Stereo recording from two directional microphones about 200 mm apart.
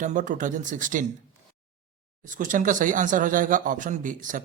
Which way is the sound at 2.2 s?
40° right (ahead or behind).